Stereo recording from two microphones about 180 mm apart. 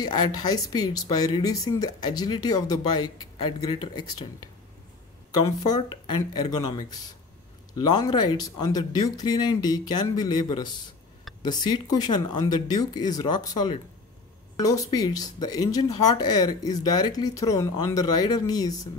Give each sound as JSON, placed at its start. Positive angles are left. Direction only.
{"t": 0.0, "sound": "speech", "side_deg": 25}
{"t": 5.4, "sound": "speech", "side_deg": 20}